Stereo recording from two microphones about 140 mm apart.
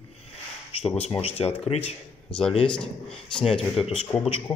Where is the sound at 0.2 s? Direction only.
45° left (ahead or behind).